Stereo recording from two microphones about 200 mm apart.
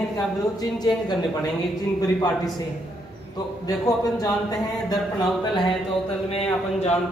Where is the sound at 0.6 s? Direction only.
20° left (ahead or behind).